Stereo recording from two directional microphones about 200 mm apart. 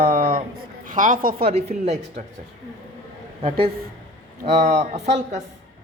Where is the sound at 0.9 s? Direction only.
40° right (ahead or behind).